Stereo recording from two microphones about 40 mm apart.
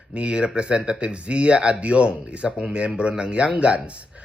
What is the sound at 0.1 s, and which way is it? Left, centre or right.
Speech, right.